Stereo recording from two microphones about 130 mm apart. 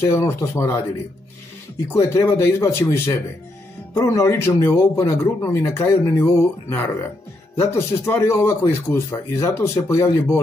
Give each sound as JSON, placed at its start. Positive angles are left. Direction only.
{"t": 0.0, "sound": "speech", "side_deg": 20}
{"t": 1.9, "sound": "speech", "side_deg": 20}